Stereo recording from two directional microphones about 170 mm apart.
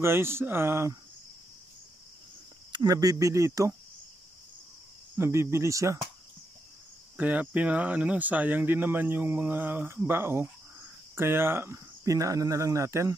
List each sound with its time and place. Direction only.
0.0 s speech: 15° right (ahead or behind)
2.7 s speech: 25° right (ahead or behind)
5.1 s speech: 15° right (ahead or behind)
7.2 s speech: 10° right (ahead or behind)